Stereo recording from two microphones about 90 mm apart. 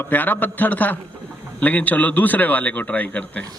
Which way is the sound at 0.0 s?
20° left (ahead or behind).